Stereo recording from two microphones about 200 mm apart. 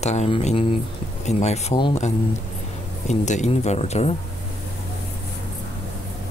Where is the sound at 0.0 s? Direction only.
35° left (ahead or behind).